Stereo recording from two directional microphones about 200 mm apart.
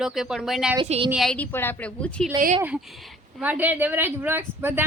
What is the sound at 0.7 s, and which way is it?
Speech, 25° right (ahead or behind).